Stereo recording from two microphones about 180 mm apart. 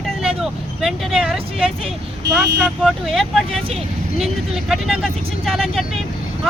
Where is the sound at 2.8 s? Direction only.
Centre (ahead or behind).